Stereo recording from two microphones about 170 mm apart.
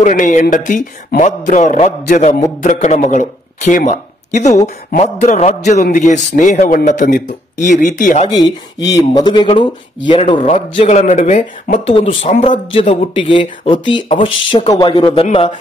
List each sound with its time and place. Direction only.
0.0 s speech: 45° left (ahead or behind)
8.3 s speech: 25° left (ahead or behind); by 11.9 s 45° left (ahead or behind)
11.9 s speech: 30° left (ahead or behind)